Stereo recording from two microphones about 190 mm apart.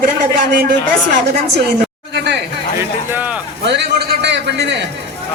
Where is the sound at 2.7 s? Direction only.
10° right (ahead or behind).